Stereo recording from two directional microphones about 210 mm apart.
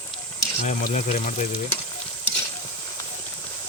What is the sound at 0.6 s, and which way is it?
Speech, 35° left (ahead or behind).